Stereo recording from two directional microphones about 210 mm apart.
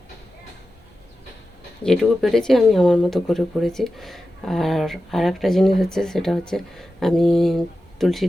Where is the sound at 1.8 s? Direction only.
Centre (ahead or behind).